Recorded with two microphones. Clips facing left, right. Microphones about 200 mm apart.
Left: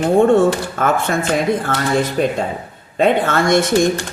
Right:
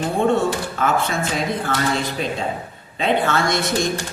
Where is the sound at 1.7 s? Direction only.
50° left (ahead or behind).